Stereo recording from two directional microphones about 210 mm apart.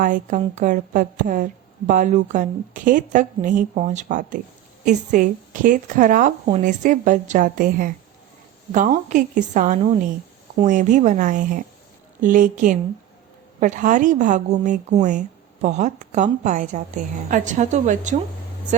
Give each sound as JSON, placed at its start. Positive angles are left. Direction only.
{"t": 0.0, "sound": "speech", "side_deg": -35}